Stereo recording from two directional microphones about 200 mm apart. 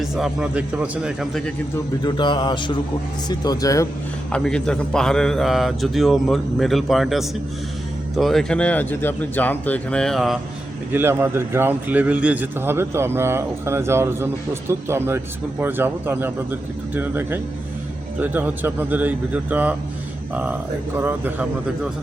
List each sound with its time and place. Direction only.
0.0 s a man's voice: 5° right (ahead or behind)
2.0 s mantra: 25° left (ahead or behind)
4.3 s a man's voice: 5° left (ahead or behind)
10.9 s a man's voice: 10° right (ahead or behind)